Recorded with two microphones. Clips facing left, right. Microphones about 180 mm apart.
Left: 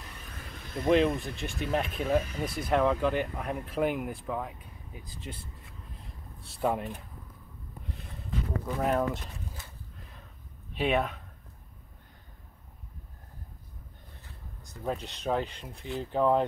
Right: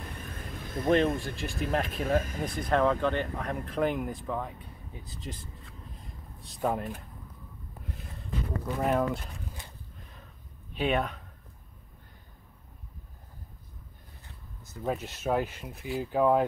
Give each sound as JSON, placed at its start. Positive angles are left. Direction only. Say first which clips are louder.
{"t": 0.0, "sound": "vehicle", "louder": "right 5 dB", "side_deg": -55}
{"t": 0.8, "sound": "speech", "louder": "left 1 dB", "side_deg": 0}
{"t": 6.5, "sound": "speech", "louder": "left 1 dB", "side_deg": 0}
{"t": 7.8, "sound": "a sound", "louder": "right 1 dB", "side_deg": 0}
{"t": 8.6, "sound": "speech", "louder": "right 1 dB", "side_deg": 0}
{"t": 10.7, "sound": "speech", "louder": "left 1 dB", "side_deg": 0}
{"t": 14.9, "sound": "speech", "louder": "right 1 dB", "side_deg": -5}